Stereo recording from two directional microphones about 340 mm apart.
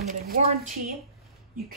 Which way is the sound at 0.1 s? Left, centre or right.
Right.